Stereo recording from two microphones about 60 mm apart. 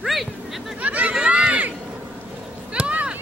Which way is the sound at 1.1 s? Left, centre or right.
Centre.